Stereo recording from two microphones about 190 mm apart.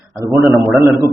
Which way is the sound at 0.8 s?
15° right (ahead or behind).